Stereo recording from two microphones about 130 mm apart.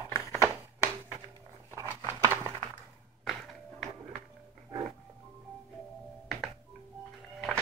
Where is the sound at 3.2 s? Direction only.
Centre (ahead or behind).